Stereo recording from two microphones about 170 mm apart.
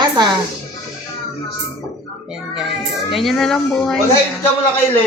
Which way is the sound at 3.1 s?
Centre (ahead or behind).